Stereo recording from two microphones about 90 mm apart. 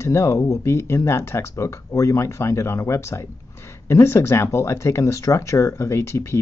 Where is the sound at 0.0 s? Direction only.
35° left (ahead or behind).